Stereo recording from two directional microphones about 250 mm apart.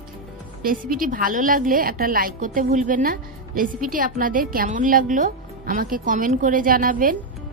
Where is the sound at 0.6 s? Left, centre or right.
Right.